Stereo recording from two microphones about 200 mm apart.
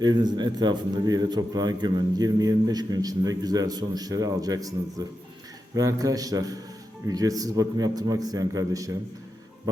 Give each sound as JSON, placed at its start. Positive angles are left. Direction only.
{"t": 0.0, "sound": "a man's voice", "side_deg": -20}